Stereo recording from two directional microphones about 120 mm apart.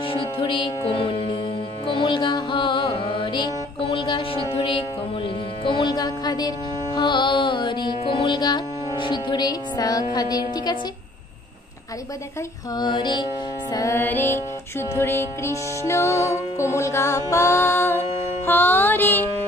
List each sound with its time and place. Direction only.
0.1 s music: 45° left (ahead or behind)
12.7 s music: 40° left (ahead or behind)
13.7 s music: 25° left (ahead or behind)